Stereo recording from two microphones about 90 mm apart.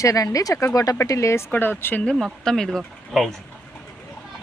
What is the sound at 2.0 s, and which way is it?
Speech, 10° left (ahead or behind).